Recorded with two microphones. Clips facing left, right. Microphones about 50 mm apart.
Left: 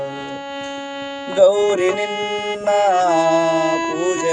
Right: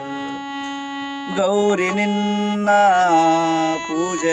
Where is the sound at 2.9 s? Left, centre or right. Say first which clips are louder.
Right 1 dB; right.